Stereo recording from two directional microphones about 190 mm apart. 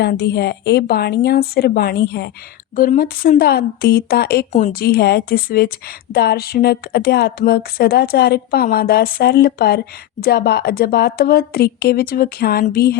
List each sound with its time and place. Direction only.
0.0 s speech: 60° left (ahead or behind)